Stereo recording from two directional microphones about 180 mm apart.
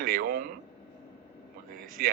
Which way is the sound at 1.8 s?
55° right (ahead or behind).